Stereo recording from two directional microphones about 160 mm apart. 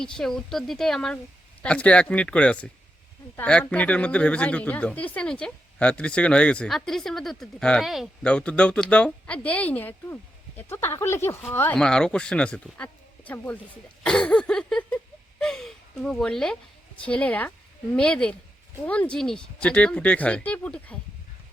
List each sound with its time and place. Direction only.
0.0 s speech: 5° left (ahead or behind)
15.4 s a sound: 5° left (ahead or behind)
17.1 s speech: 10° left (ahead or behind)